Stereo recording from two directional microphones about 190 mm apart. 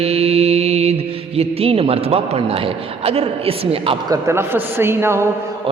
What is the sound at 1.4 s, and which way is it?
A man's voice, 30° right (ahead or behind).